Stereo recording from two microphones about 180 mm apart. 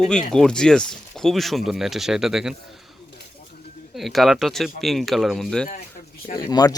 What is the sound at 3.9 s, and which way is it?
Speech, centre (ahead or behind).